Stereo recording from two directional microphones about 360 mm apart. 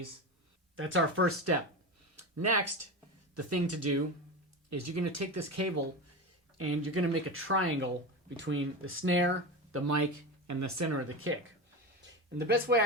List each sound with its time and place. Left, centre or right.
0.8 s speech: right
9.7 s speech: right
12.4 s speech: right